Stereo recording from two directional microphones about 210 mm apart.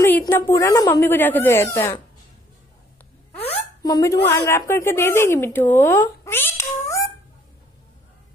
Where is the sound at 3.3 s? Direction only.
30° left (ahead or behind).